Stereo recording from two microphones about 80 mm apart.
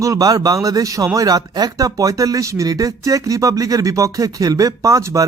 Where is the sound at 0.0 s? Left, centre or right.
Right.